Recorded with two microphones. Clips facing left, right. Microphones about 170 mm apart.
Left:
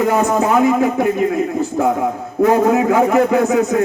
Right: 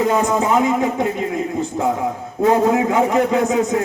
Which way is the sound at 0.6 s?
20° right (ahead or behind).